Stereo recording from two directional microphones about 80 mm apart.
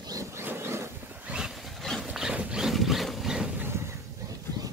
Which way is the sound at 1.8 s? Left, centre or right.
Centre.